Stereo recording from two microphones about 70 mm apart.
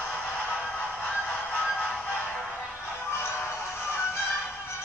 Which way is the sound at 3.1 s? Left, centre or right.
Left.